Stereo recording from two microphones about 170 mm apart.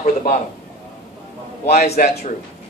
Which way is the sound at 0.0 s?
45° left (ahead or behind).